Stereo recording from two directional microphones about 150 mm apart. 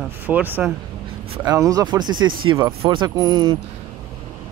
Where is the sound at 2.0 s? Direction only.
30° right (ahead or behind).